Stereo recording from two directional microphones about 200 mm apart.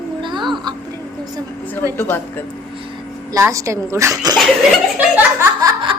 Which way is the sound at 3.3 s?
15° right (ahead or behind).